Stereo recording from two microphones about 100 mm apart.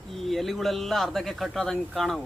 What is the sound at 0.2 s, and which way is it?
Speech, centre (ahead or behind).